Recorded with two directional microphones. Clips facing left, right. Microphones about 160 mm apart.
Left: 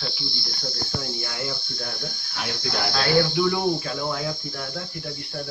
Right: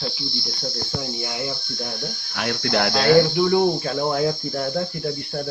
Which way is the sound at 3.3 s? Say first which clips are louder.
Right 4 dB; 30° right (ahead or behind).